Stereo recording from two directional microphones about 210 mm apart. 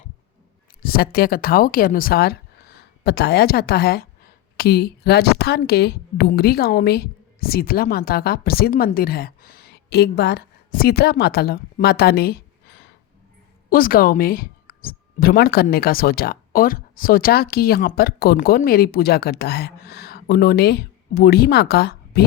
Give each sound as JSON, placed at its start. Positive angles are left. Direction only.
{"t": 0.8, "sound": "speech", "side_deg": 45}